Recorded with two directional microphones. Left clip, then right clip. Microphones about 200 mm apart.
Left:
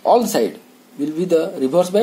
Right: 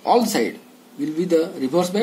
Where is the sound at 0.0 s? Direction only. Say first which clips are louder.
Left 3 dB; 30° left (ahead or behind).